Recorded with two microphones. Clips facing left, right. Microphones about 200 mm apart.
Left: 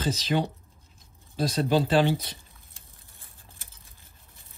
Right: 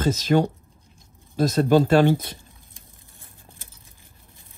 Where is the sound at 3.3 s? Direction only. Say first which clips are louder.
Right 5 dB; 15° right (ahead or behind).